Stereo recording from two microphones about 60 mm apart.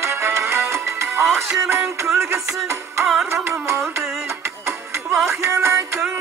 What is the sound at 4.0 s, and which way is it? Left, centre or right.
Music, right.